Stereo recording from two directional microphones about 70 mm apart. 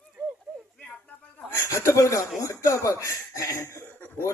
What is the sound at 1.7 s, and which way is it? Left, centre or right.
Laughter, left.